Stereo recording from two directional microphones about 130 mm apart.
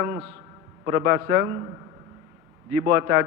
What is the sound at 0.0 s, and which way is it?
A man's voice, 20° right (ahead or behind).